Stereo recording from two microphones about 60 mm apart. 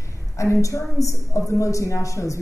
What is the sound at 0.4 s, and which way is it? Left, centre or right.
A man's voice, left.